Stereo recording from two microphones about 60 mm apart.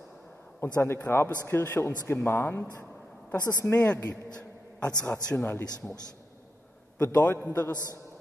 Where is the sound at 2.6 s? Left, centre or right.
Left.